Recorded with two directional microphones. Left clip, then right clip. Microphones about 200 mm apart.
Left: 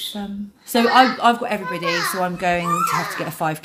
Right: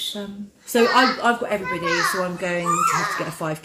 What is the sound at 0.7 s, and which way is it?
A woman's voice, 60° left (ahead or behind).